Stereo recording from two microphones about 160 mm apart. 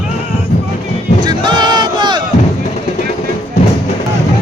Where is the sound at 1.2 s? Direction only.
25° right (ahead or behind).